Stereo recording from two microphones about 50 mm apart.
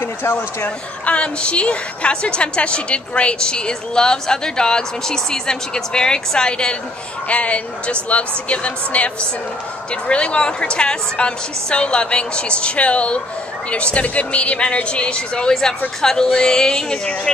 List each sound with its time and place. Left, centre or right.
0.0 s a sound: left
1.0 s a woman's voice: left
7.2 s a woman's voice: left